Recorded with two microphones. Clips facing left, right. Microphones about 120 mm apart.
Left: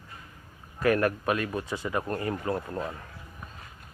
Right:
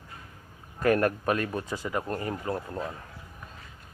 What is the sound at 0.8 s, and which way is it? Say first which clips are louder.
Speech: right 1 dB; 35° right (ahead or behind).